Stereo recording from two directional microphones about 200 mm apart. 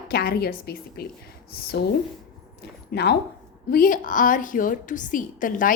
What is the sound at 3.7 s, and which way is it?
A woman's voice, 45° left (ahead or behind).